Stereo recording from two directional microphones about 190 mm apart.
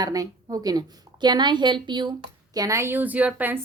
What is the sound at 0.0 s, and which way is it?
A woman's voice, 20° right (ahead or behind).